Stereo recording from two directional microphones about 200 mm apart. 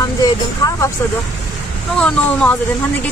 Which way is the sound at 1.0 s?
15° left (ahead or behind).